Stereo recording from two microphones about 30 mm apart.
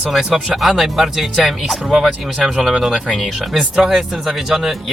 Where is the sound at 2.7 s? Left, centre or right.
Right.